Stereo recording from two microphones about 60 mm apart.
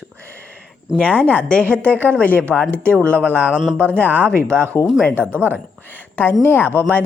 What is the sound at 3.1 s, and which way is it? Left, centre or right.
Speech, left.